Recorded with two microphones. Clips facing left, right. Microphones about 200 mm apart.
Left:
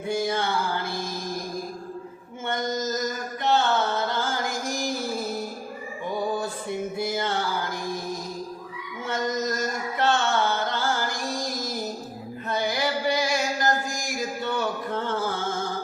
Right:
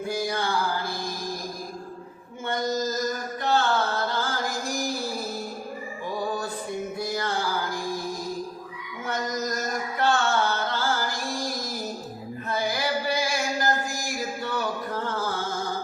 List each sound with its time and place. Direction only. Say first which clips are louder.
0.1 s music: left 4 dB; 25° left (ahead or behind)
2.5 s a sound: right 1 dB; 20° left (ahead or behind)
6.9 s music: left 1 dB; 25° left (ahead or behind)
10.0 s music: even; 20° left (ahead or behind)
12.5 s chant: left 1 dB; 20° left (ahead or behind)
13.9 s a sound: left 1 dB; 20° left (ahead or behind)
15.1 s music: left 2 dB; 25° left (ahead or behind)